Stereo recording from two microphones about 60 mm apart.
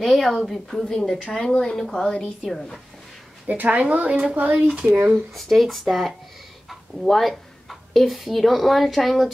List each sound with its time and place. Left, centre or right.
0.0 s speech: centre
3.4 s a woman's voice: right
5.3 s speech: centre